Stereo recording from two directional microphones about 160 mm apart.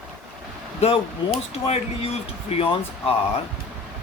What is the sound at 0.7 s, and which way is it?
Speech, 40° left (ahead or behind).